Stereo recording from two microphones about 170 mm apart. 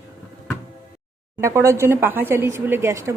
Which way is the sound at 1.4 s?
15° right (ahead or behind).